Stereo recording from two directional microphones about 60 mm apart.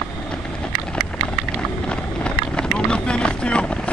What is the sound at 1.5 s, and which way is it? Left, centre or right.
Vehicle, centre.